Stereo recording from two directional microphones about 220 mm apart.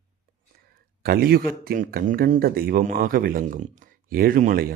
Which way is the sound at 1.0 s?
45° right (ahead or behind).